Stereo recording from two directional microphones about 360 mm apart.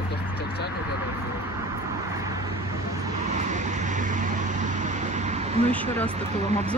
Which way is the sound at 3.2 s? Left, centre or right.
Centre.